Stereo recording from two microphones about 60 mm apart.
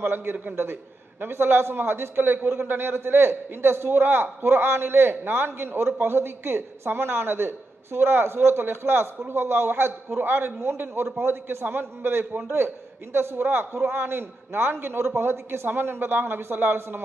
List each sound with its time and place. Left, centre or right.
0.0 s a man's voice: right